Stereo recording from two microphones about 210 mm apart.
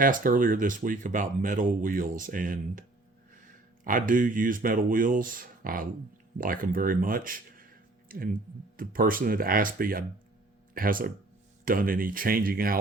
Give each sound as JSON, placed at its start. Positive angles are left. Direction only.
{"t": 0.0, "sound": "speech", "side_deg": -40}
{"t": 3.8, "sound": "speech", "side_deg": -40}